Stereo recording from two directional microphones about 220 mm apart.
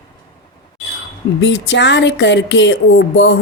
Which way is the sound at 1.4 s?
55° left (ahead or behind).